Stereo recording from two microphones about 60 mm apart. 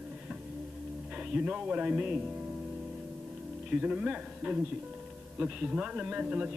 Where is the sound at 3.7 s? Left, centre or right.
Centre.